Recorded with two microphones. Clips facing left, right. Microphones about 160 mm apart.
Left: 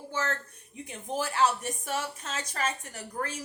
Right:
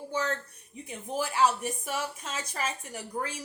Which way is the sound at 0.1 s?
15° right (ahead or behind).